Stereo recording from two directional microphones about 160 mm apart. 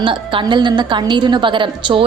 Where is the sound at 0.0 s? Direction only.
30° right (ahead or behind).